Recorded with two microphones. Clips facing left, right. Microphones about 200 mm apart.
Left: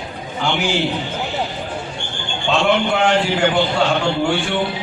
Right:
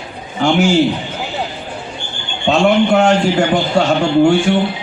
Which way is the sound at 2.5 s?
45° right (ahead or behind).